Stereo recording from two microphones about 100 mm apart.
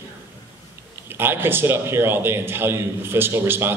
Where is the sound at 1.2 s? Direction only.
20° right (ahead or behind).